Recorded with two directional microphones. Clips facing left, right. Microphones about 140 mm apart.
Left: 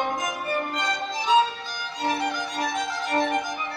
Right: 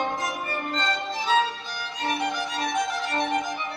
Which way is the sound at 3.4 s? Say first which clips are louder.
Even; 20° right (ahead or behind).